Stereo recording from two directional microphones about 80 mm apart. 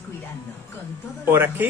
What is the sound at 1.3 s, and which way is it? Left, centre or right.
Speech, right.